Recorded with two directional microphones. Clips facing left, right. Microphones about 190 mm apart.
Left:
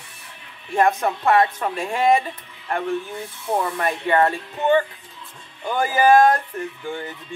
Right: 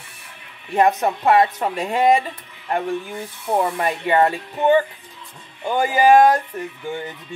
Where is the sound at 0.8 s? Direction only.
15° right (ahead or behind).